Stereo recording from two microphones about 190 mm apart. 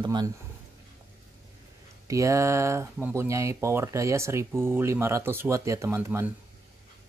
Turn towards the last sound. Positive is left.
turn(degrees=-10)  # may be behind; listen again after turning